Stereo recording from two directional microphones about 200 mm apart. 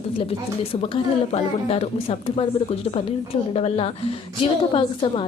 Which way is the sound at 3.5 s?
30° left (ahead or behind).